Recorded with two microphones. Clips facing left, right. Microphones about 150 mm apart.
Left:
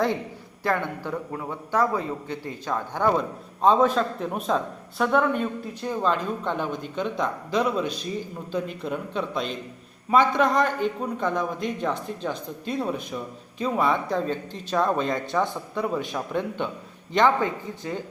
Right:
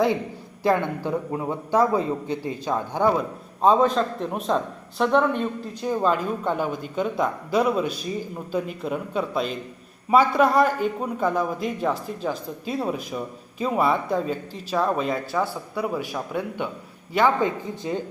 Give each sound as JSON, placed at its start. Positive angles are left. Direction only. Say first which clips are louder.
{"t": 0.6, "sound": "a man's voice", "louder": "right 4 dB", "side_deg": -15}